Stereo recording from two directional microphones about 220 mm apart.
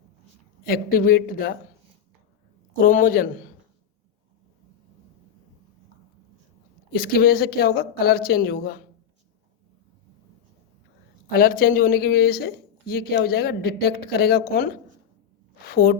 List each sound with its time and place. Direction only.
0.6 s speech: 40° left (ahead or behind)
2.8 s speech: 35° left (ahead or behind)
6.9 s speech: 45° left (ahead or behind)
11.3 s speech: 40° left (ahead or behind)